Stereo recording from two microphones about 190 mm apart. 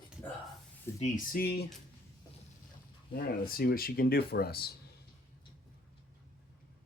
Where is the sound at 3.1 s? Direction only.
50° left (ahead or behind).